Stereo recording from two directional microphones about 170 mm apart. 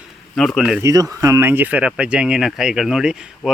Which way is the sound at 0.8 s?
20° right (ahead or behind).